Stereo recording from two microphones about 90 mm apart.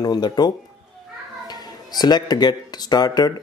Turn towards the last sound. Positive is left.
turn(degrees=50)  # may be behind; listen again after turning